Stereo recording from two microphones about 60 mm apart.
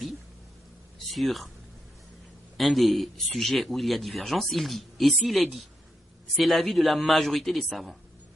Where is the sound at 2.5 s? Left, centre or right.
Centre.